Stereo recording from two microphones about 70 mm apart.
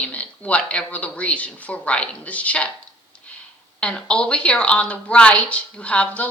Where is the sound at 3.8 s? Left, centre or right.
Centre.